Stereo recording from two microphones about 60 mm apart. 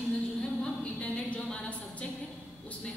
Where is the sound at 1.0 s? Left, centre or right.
Centre.